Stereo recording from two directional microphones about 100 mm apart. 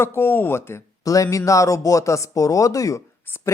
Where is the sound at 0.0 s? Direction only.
25° left (ahead or behind).